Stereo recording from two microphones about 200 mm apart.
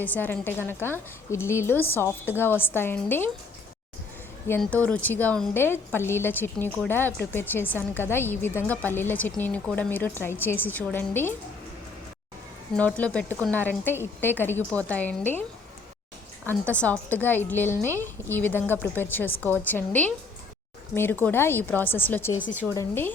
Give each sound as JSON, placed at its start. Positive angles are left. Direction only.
{"t": 0.0, "sound": "a woman's voice", "side_deg": 10}
{"t": 4.4, "sound": "a woman's voice", "side_deg": 10}
{"t": 12.7, "sound": "a woman's voice", "side_deg": 5}
{"t": 16.5, "sound": "a woman's voice", "side_deg": 5}